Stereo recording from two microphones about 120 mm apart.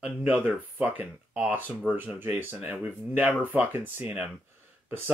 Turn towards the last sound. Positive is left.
turn(degrees=-20)  # may be behind; listen again after turning